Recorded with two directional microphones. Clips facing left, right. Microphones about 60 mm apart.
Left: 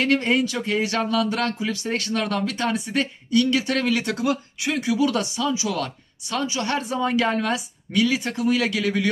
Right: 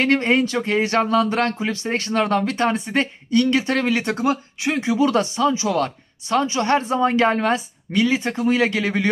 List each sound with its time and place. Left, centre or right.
0.0 s speech: right